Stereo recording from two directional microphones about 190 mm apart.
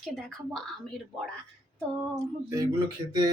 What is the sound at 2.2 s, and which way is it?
Speech, 15° right (ahead or behind).